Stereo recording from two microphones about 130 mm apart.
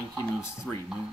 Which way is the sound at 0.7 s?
5° left (ahead or behind).